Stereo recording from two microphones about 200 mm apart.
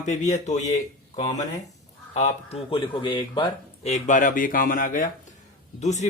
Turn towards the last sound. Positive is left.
turn(degrees=35)  # may be behind; listen again after turning